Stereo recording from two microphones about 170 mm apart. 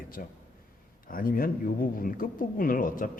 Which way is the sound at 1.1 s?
55° left (ahead or behind).